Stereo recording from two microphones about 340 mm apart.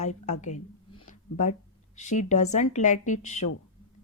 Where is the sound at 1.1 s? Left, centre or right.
Left.